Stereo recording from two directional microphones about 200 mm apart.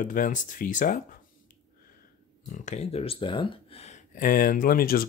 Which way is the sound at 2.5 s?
35° left (ahead or behind).